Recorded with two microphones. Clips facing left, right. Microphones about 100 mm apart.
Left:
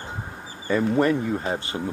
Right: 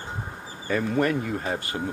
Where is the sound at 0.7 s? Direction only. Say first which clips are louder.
Left 3 dB; 30° left (ahead or behind).